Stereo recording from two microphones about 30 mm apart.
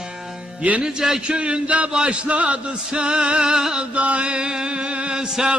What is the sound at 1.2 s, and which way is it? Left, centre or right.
Male singing, right.